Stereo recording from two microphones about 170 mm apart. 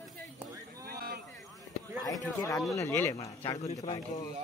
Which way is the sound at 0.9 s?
65° right (ahead or behind).